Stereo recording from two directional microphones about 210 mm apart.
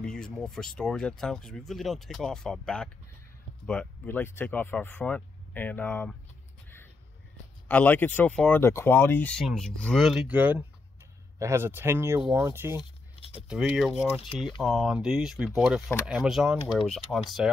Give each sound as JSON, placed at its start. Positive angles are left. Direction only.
{"t": 0.0, "sound": "speech", "side_deg": 5}
{"t": 7.6, "sound": "speech", "side_deg": 5}